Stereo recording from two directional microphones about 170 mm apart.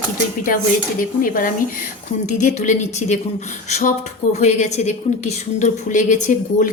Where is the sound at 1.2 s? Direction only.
55° left (ahead or behind).